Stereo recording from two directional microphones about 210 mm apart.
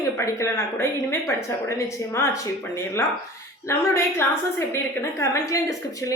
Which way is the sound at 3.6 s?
15° left (ahead or behind).